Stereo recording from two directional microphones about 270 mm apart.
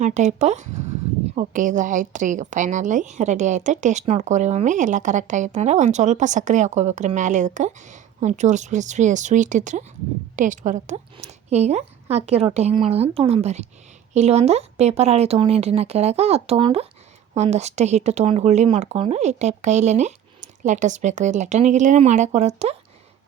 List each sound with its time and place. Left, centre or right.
0.0 s a woman's voice: right